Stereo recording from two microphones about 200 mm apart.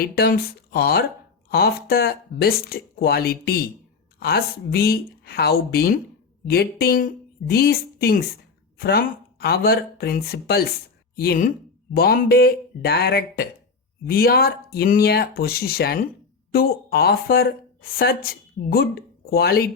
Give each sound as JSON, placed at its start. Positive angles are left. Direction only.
{"t": 0.0, "sound": "a woman's voice", "side_deg": 50}